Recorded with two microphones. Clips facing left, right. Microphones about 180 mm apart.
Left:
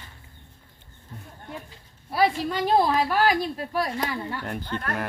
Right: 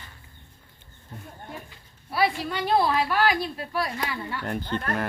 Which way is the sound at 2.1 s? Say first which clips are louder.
Left 2 dB; 40° left (ahead or behind).